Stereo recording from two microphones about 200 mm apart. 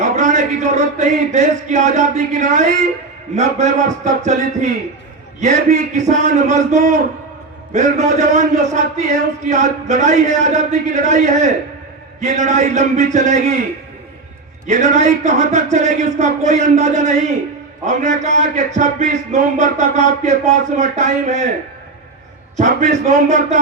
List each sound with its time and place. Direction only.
0.0 s a man's voice: 35° right (ahead or behind)
14.7 s a man's voice: 35° right (ahead or behind)
22.5 s a man's voice: 35° right (ahead or behind)